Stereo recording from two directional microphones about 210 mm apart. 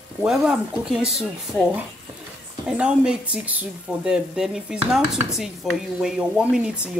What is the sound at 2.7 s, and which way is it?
Speech, 5° right (ahead or behind).